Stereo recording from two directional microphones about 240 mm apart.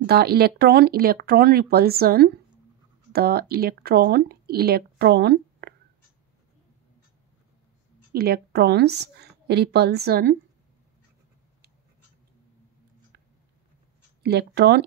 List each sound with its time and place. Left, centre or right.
0.0 s speech: right
8.1 s a woman's voice: right
14.2 s a woman's voice: right